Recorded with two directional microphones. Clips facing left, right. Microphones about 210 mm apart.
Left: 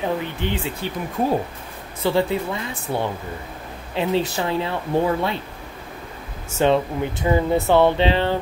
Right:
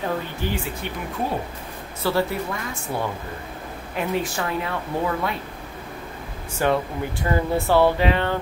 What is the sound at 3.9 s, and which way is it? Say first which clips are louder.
Speech: left 4 dB; 25° left (ahead or behind).